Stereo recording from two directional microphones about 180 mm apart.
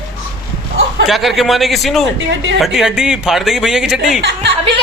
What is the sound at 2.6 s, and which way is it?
A man's voice, centre (ahead or behind).